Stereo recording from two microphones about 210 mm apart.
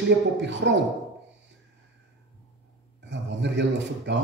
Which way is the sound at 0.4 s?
55° right (ahead or behind).